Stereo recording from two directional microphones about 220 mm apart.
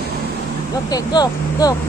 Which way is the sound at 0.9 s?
15° left (ahead or behind).